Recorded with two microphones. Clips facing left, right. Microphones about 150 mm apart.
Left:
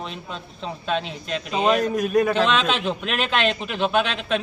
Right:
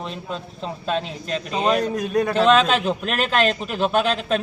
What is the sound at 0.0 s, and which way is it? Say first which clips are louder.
A man's voice: right 3 dB; centre (ahead or behind).